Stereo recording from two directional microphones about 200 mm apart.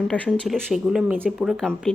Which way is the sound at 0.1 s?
Centre (ahead or behind).